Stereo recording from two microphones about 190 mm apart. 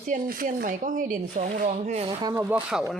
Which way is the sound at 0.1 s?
45° right (ahead or behind).